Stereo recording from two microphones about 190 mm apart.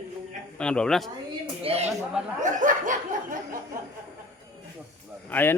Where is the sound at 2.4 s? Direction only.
40° right (ahead or behind).